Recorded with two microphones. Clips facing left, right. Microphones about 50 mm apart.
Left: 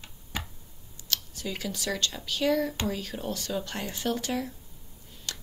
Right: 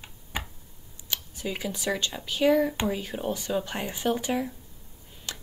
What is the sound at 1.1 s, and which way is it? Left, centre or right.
A woman's voice, centre.